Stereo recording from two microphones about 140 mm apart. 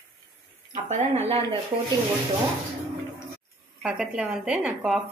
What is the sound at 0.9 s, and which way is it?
Speech, 50° right (ahead or behind).